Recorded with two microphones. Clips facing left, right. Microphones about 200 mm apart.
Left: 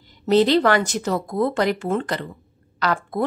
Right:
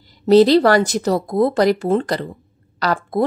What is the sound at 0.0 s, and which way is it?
A woman's voice, 35° right (ahead or behind).